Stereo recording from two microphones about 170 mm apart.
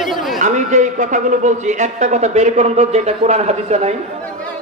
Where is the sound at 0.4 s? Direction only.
45° right (ahead or behind).